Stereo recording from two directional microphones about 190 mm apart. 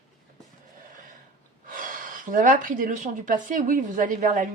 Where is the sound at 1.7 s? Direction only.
45° right (ahead or behind).